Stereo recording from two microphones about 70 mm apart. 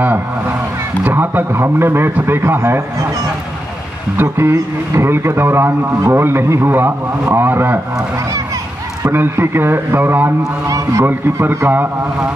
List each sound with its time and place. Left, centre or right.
1.0 s a man's voice: right
4.2 s a man's voice: right
9.1 s a man's voice: right
10.7 s a man's voice: right
11.1 s a man's voice: right